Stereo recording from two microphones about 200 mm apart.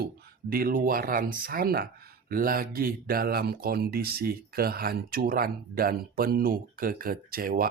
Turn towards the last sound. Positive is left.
turn(degrees=-45)  # may be behind; listen again after turning